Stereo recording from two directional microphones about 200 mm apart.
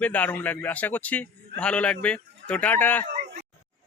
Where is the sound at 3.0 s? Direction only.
40° right (ahead or behind).